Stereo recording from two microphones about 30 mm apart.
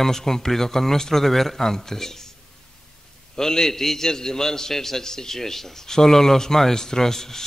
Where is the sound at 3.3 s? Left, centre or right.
Centre.